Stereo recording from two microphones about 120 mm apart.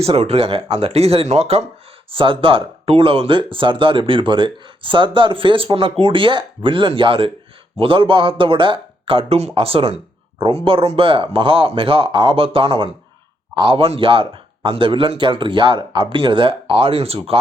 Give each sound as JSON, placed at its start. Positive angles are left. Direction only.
{"t": 0.0, "sound": "speech", "side_deg": -55}
{"t": 2.0, "sound": "speech", "side_deg": -45}